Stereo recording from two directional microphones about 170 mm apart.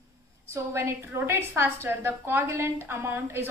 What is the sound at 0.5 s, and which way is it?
A woman's voice, 15° right (ahead or behind).